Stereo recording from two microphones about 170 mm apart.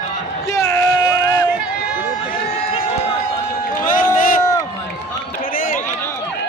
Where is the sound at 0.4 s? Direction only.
20° left (ahead or behind).